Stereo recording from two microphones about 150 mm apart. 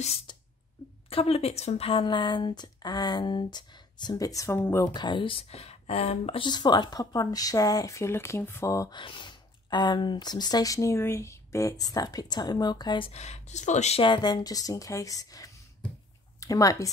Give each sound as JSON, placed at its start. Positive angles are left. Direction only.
{"t": 1.1, "sound": "speech", "side_deg": 40}
{"t": 4.8, "sound": "speech", "side_deg": 30}
{"t": 8.9, "sound": "speech", "side_deg": 35}
{"t": 13.1, "sound": "speech", "side_deg": 45}
{"t": 14.0, "sound": "speech", "side_deg": 30}